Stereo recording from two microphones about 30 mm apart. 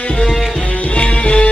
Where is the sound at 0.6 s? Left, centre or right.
Left.